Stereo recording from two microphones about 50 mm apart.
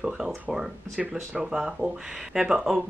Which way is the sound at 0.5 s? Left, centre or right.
Centre.